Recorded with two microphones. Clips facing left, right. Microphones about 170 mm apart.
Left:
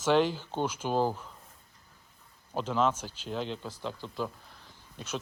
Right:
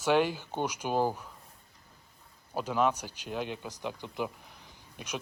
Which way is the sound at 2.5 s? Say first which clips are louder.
Even; 10° right (ahead or behind).